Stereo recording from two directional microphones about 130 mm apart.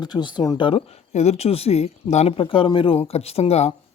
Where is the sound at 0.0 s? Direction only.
35° left (ahead or behind).